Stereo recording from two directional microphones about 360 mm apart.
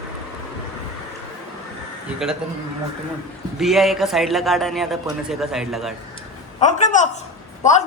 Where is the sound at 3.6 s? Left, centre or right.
Centre.